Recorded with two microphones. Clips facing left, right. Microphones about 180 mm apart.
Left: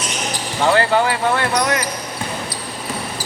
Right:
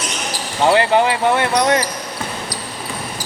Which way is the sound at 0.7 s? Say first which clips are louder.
Right 2 dB; 20° right (ahead or behind).